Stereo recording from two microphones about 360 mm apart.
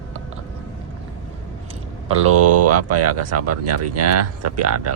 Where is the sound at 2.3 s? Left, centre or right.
Right.